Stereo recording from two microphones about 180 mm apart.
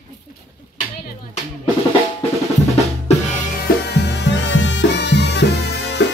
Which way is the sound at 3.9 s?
70° left (ahead or behind).